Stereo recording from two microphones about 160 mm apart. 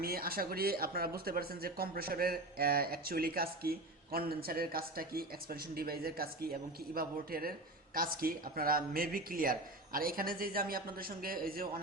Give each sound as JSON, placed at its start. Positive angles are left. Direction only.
{"t": 0.0, "sound": "speech", "side_deg": -70}